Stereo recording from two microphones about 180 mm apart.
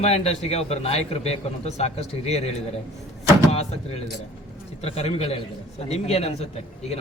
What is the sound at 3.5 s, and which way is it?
A man's voice, 35° left (ahead or behind).